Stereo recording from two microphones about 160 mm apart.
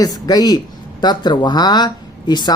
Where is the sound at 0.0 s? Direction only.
25° left (ahead or behind).